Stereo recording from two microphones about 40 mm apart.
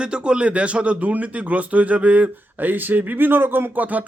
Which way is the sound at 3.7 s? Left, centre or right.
Right.